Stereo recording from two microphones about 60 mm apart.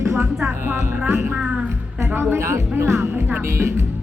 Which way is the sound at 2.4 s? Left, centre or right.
Right.